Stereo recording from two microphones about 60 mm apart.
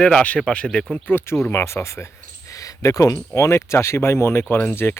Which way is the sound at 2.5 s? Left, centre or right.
Left.